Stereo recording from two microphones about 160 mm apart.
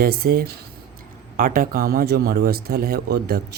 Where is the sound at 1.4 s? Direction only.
60° right (ahead or behind).